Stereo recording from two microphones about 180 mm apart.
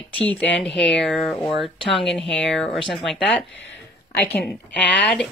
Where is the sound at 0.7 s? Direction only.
80° left.